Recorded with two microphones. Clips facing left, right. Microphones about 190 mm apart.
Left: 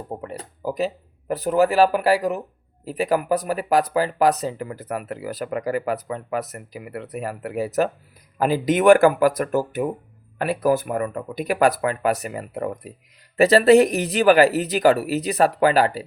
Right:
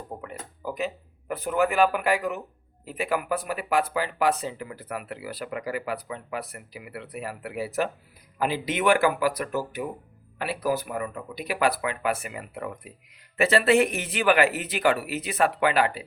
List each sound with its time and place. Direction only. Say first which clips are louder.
0.1 s speech: left 6 dB; 35° left (ahead or behind)